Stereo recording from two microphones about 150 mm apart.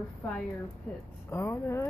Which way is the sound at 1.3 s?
15° left (ahead or behind).